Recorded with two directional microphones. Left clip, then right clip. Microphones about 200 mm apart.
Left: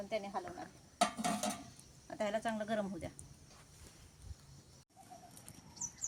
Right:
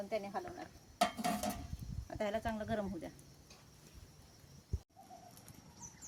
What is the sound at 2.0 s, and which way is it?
Speech, 10° left (ahead or behind).